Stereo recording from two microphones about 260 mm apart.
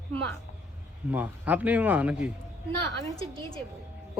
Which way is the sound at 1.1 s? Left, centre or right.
Centre.